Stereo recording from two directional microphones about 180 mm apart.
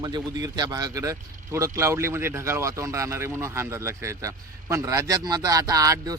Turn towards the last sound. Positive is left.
turn(degrees=-20)  # may be behind; listen again after turning